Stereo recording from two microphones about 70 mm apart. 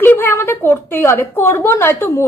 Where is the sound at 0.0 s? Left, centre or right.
Left.